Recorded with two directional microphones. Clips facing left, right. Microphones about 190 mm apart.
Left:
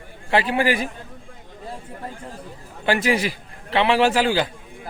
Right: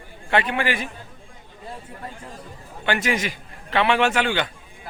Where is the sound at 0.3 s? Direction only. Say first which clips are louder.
Left 3 dB; 30° left (ahead or behind).